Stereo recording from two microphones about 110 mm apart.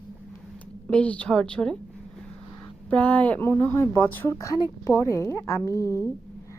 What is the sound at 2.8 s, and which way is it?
A woman's voice, 15° left (ahead or behind).